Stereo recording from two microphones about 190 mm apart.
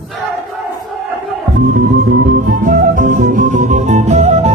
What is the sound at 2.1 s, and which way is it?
Music, 45° right (ahead or behind).